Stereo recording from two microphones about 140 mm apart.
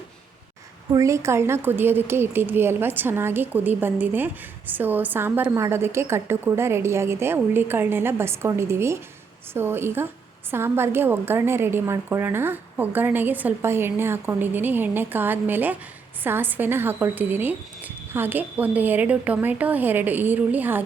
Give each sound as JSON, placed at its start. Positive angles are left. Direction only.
{"t": 0.9, "sound": "speech", "side_deg": -20}